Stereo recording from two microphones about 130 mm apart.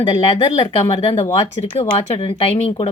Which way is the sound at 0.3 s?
50° left (ahead or behind).